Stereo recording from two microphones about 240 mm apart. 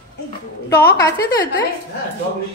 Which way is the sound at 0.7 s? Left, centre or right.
Centre.